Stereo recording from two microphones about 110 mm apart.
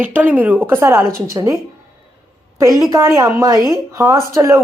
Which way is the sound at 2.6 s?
30° right (ahead or behind).